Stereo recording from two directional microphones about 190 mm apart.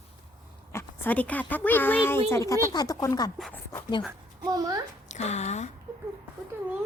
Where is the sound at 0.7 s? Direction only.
10° left (ahead or behind).